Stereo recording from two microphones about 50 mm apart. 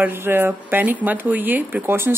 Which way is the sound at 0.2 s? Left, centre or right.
Right.